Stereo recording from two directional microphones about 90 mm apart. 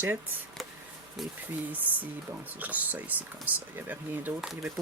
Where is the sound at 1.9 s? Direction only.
20° right (ahead or behind).